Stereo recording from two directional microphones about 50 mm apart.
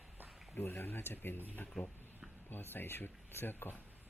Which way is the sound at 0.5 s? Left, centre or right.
Left.